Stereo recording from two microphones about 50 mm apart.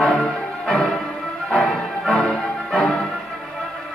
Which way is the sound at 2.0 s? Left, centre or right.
Centre.